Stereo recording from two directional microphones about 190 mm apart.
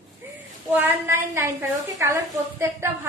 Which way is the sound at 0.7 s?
10° right (ahead or behind).